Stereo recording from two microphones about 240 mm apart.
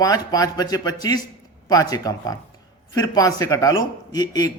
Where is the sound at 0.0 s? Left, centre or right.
Centre.